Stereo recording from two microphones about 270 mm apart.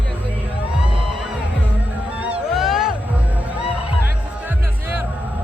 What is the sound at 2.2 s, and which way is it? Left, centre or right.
Music, centre.